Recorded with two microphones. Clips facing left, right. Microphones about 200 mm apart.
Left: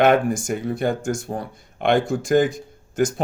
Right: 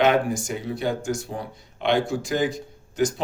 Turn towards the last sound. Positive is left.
turn(degrees=50)  # may be behind; listen again after turning